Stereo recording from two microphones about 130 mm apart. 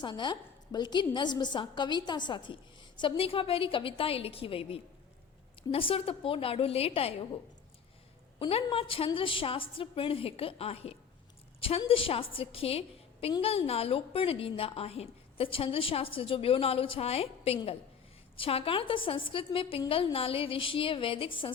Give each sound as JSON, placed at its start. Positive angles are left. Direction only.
{"t": 0.0, "sound": "a woman's voice", "side_deg": 35}
{"t": 8.4, "sound": "a woman's voice", "side_deg": 45}